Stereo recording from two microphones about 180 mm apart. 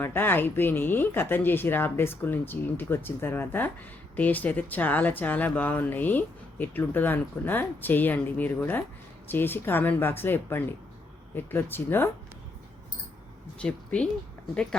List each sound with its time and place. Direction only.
0.0 s speech: 10° left (ahead or behind)
13.6 s speech: 5° left (ahead or behind)